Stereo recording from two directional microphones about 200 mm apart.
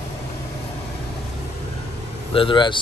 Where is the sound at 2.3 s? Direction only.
25° left (ahead or behind).